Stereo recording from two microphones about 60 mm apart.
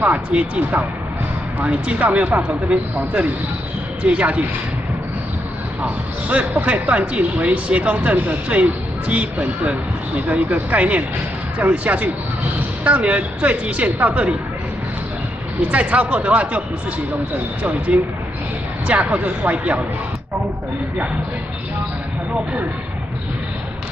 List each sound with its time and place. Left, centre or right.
0.0 s speech: right
4.0 s speech: right
5.8 s speech: right
15.7 s speech: right
17.6 s speech: right